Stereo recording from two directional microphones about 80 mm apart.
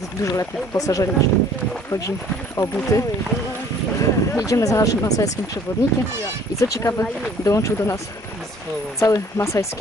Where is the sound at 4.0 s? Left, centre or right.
Left.